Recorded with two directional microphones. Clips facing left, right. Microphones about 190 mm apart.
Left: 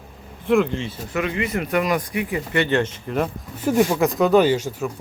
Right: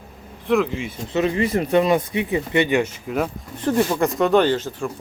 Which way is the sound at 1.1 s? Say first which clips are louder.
Right 4 dB; 30° right (ahead or behind).